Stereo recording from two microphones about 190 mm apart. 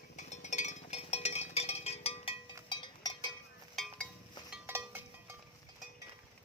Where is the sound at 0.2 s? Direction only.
40° left (ahead or behind).